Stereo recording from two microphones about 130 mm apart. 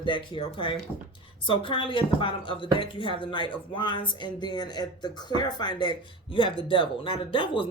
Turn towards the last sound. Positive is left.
turn(degrees=40)  # may be behind; listen again after turning